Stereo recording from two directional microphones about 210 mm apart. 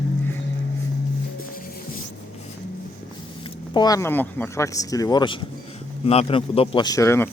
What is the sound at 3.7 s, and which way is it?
Speech, 20° left (ahead or behind).